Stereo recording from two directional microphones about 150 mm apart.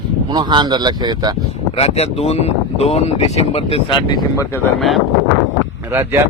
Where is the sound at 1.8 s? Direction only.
45° left (ahead or behind); by 4.6 s 20° left (ahead or behind).